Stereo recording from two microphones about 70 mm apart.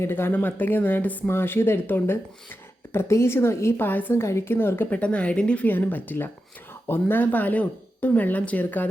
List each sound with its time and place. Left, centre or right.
0.0 s speech: left
4.2 s speech: left
4.9 s speech: centre
5.6 s speech: left